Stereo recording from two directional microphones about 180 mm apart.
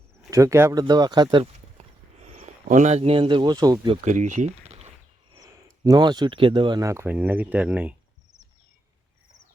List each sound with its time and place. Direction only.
0.3 s speech: 15° right (ahead or behind)
4.0 s speech: 40° right (ahead or behind)
5.4 s speech: 20° right (ahead or behind)